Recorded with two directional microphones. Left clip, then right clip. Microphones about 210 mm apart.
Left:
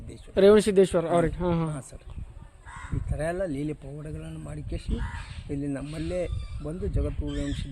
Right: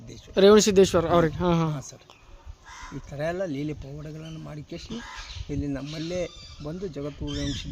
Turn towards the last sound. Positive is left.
turn(degrees=-5)  # may be behind; listen again after turning